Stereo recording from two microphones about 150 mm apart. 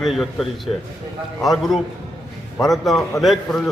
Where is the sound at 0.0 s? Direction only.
Centre (ahead or behind).